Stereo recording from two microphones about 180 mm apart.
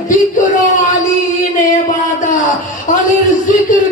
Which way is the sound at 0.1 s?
45° left (ahead or behind).